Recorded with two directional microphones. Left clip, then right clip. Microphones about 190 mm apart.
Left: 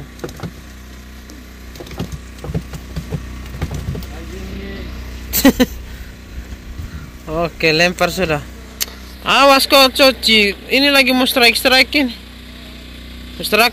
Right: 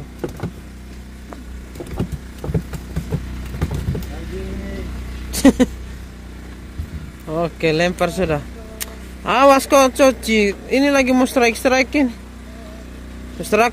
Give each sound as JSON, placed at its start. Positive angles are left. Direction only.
{"t": 2.4, "sound": "wood", "side_deg": -40}
{"t": 5.3, "sound": "a sound", "side_deg": 0}
{"t": 7.2, "sound": "speech", "side_deg": 0}
{"t": 13.4, "sound": "speech", "side_deg": -10}